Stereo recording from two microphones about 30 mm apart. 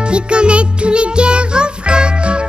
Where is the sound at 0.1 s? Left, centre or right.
Right.